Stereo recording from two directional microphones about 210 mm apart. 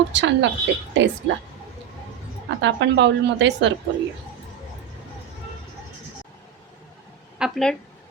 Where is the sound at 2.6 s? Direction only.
60° right (ahead or behind).